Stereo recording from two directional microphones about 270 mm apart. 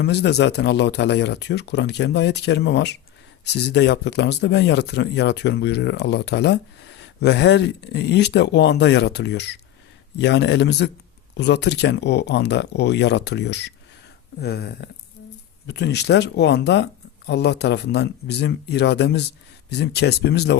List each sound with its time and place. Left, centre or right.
0.0 s speech: left